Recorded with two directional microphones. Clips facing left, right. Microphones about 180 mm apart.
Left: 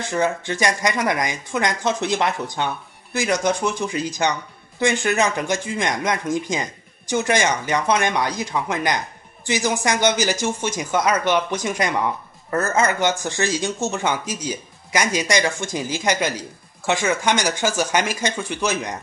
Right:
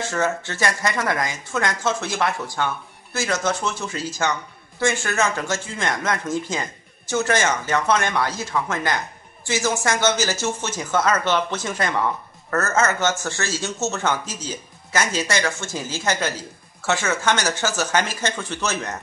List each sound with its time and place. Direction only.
0.1 s speech: 15° left (ahead or behind)